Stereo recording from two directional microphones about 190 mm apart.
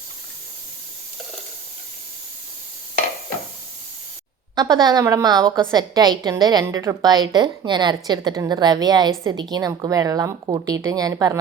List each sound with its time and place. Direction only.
4.5 s a woman's voice: 20° right (ahead or behind)